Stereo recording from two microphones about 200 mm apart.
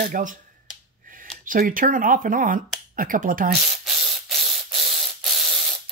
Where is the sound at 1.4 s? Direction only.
45° right (ahead or behind).